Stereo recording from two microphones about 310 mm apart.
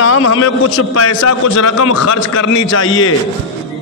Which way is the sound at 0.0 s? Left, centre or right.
Left.